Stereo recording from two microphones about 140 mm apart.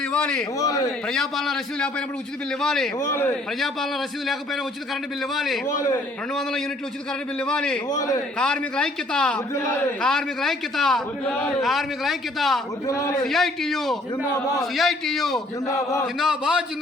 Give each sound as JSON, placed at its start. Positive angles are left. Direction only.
{"t": 0.1, "sound": "a man's voice", "side_deg": 5}
{"t": 0.6, "sound": "a man's voice", "side_deg": 25}
{"t": 1.0, "sound": "a man's voice", "side_deg": 5}
{"t": 3.0, "sound": "a man's voice", "side_deg": 20}
{"t": 5.3, "sound": "a man's voice", "side_deg": 0}
{"t": 5.6, "sound": "a man's voice", "side_deg": 25}
{"t": 7.4, "sound": "a man's voice", "side_deg": 5}
{"t": 7.9, "sound": "a man's voice", "side_deg": 25}
{"t": 8.4, "sound": "a man's voice", "side_deg": 5}
{"t": 12.9, "sound": "a man's voice", "side_deg": 20}
{"t": 13.2, "sound": "a man's voice", "side_deg": 0}
{"t": 15.6, "sound": "a man's voice", "side_deg": 20}
{"t": 16.1, "sound": "a man's voice", "side_deg": -5}